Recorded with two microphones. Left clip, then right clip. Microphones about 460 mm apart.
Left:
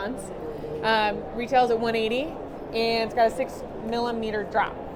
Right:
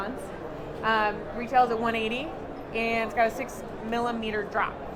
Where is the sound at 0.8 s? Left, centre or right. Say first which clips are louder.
Left 2 dB; centre.